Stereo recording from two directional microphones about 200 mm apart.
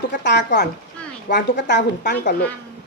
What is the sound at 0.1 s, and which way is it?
A woman's voice, 60° left (ahead or behind).